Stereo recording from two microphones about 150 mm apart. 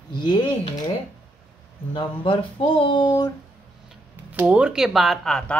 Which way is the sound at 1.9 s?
35° left (ahead or behind).